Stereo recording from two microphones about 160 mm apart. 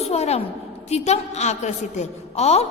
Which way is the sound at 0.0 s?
40° left (ahead or behind).